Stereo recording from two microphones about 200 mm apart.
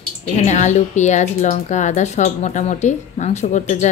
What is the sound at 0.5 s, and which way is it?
A woman's voice, 35° left (ahead or behind).